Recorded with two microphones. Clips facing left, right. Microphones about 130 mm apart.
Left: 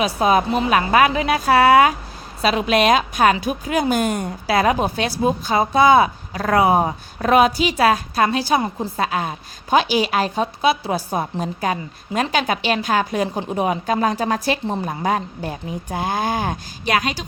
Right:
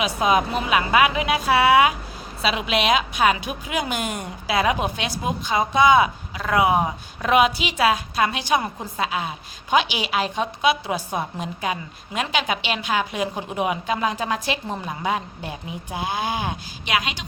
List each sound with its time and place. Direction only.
0.0 s a woman's voice: 35° left (ahead or behind)
9.0 s a woman's voice: 45° left (ahead or behind)